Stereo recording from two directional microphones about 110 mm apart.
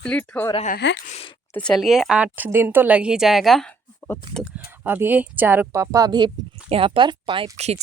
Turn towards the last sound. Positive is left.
turn(degrees=-75)  # may be behind; listen again after turning